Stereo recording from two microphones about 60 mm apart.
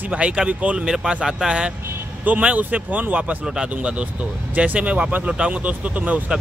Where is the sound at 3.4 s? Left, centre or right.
Centre.